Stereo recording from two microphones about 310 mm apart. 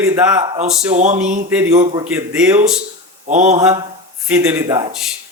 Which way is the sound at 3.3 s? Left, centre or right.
Right.